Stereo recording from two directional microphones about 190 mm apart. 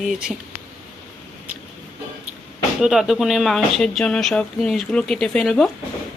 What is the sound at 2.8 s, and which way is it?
Speech, centre (ahead or behind).